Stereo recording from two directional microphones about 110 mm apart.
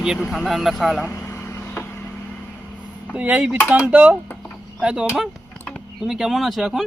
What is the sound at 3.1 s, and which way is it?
Speech, 15° right (ahead or behind).